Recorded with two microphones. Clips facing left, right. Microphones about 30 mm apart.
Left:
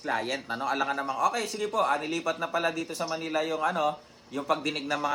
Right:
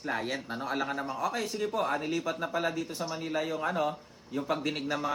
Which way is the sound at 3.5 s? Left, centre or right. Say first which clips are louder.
Left 4 dB; left.